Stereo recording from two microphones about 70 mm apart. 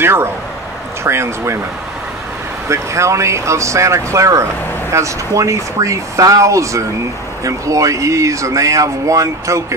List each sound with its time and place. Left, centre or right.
0.0 s speech: right
2.7 s speech: right